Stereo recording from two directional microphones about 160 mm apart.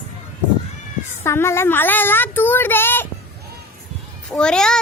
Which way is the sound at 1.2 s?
15° left (ahead or behind).